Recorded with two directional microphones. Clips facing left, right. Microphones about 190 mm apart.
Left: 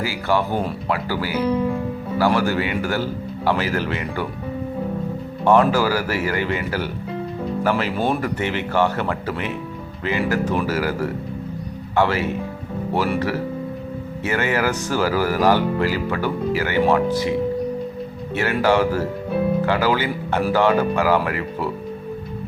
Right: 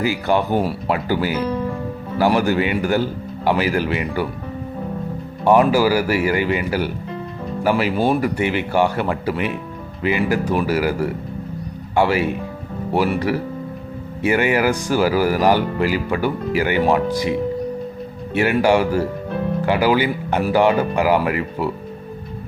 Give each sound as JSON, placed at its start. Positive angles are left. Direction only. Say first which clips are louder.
{"t": 0.0, "sound": "speech", "louder": "right 3 dB", "side_deg": -20}
{"t": 1.4, "sound": "speech", "louder": "left 2 dB", "side_deg": 10}
{"t": 2.1, "sound": "speech", "louder": "right 2 dB", "side_deg": -20}
{"t": 5.5, "sound": "speech", "louder": "right 2 dB", "side_deg": -10}
{"t": 14.3, "sound": "speech", "louder": "right 4 dB", "side_deg": -15}
{"t": 18.3, "sound": "speech", "louder": "right 2 dB", "side_deg": -15}